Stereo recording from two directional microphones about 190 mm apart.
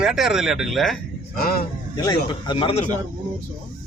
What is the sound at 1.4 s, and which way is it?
Speech, 50° left (ahead or behind).